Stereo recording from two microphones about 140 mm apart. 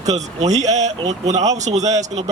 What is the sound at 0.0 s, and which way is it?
Speech, 55° right (ahead or behind).